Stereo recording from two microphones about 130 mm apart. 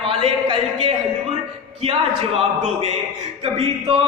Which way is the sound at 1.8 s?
50° right (ahead or behind).